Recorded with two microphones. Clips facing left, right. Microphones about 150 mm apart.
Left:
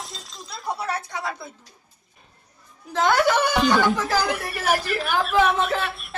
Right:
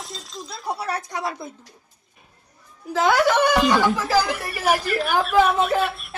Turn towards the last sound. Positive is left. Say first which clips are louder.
# right 4 dB
turn(degrees=0)  # may be behind; listen again after turning